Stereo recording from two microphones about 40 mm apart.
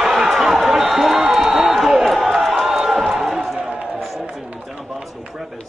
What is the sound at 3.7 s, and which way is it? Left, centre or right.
Run, right.